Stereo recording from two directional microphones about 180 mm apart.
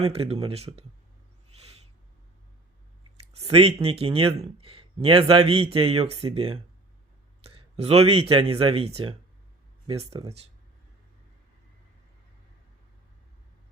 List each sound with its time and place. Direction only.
0.0 s speech: 35° right (ahead or behind)
3.3 s speech: 35° right (ahead or behind)